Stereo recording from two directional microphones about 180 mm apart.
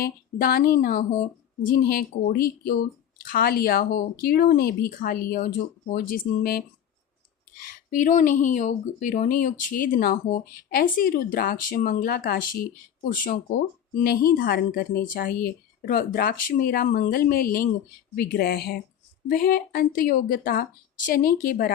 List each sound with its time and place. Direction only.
0.0 s speech: 55° left (ahead or behind)
7.9 s speech: 45° left (ahead or behind); by 18.7 s 65° left (ahead or behind)
19.3 s speech: 55° left (ahead or behind)